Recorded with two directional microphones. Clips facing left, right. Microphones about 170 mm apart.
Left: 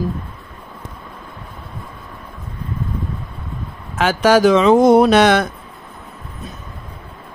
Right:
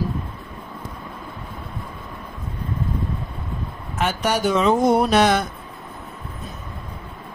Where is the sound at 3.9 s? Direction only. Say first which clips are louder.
Left 8 dB; 90° left.